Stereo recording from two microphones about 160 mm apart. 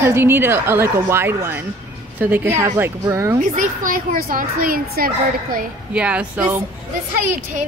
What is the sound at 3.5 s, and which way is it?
Speech, 60° right (ahead or behind).